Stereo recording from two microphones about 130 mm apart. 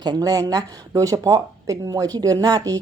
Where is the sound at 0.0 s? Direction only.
30° right (ahead or behind).